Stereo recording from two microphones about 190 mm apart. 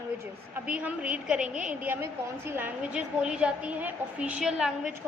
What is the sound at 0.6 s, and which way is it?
A woman's voice, 5° right (ahead or behind).